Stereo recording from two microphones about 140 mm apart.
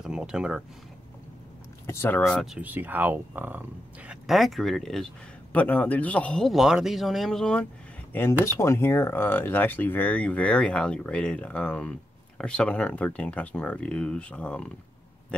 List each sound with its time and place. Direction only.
0.0 s speech: 5° right (ahead or behind)
1.9 s speech: 15° left (ahead or behind)
2.6 s speech: 15° right (ahead or behind); by 7.6 s 5° left (ahead or behind)
8.1 s speech: 15° left (ahead or behind)